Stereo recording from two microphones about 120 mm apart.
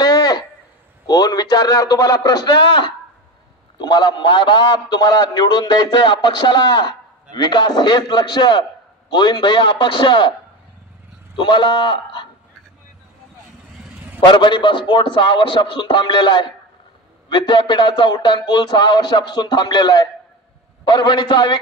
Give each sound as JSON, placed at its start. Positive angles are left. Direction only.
{"t": 0.0, "sound": "a sound", "side_deg": 35}
{"t": 1.0, "sound": "a man's voice", "side_deg": 35}
{"t": 3.8, "sound": "a man's voice", "side_deg": 40}
{"t": 11.3, "sound": "a man's voice", "side_deg": 40}
{"t": 14.2, "sound": "a man's voice", "side_deg": 40}